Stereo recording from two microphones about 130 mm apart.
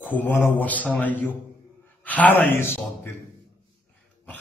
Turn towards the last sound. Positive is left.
turn(degrees=20)  # may be behind; listen again after turning